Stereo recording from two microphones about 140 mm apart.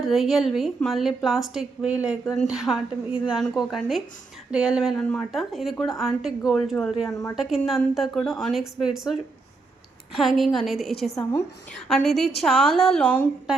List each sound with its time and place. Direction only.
0.0 s a woman's voice: centre (ahead or behind)
7.1 s a woman's voice: 25° left (ahead or behind)
7.3 s a woman's voice: centre (ahead or behind)
10.2 s a woman's voice: centre (ahead or behind)